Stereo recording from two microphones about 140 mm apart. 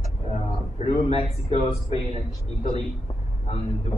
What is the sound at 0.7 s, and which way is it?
A man's voice, 50° left (ahead or behind).